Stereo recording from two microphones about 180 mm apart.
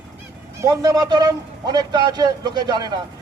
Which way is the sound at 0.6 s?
20° right (ahead or behind).